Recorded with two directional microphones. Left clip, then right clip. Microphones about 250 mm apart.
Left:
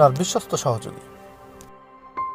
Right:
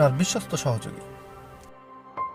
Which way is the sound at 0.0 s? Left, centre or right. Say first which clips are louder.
Left 5 dB; centre.